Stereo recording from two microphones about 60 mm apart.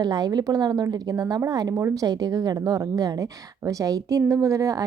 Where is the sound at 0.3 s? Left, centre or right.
Right.